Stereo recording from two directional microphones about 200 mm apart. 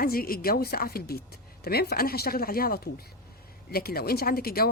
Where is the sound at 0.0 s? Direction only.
45° left (ahead or behind).